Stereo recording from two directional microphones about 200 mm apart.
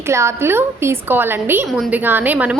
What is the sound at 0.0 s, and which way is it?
A woman's voice, 15° right (ahead or behind).